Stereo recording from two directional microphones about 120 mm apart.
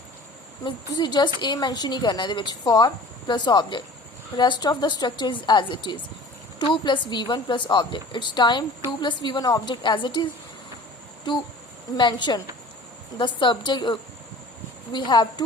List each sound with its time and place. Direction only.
0.6 s speech: 35° left (ahead or behind)
11.9 s speech: 40° left (ahead or behind)